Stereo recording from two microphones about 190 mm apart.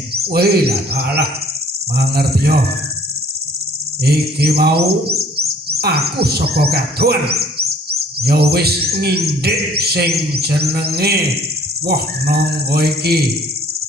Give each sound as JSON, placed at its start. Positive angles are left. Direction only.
{"t": 0.1, "sound": "speech", "side_deg": -55}
{"t": 4.0, "sound": "speech", "side_deg": -55}